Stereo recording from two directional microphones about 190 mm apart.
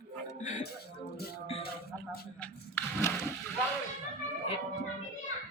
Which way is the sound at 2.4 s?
10° left (ahead or behind).